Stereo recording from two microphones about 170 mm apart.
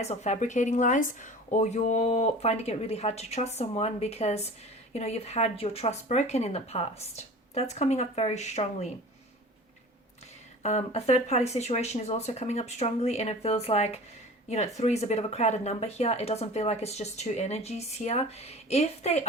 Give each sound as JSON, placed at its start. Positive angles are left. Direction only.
{"t": 0.0, "sound": "speech", "side_deg": 40}
{"t": 10.6, "sound": "speech", "side_deg": 40}